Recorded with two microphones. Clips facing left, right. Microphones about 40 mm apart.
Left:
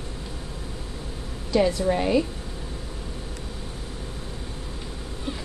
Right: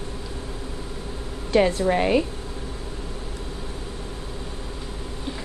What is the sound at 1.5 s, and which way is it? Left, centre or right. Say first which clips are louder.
Speech: right 2 dB; right.